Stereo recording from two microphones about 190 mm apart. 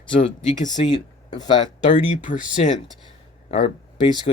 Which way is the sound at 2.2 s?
40° left (ahead or behind).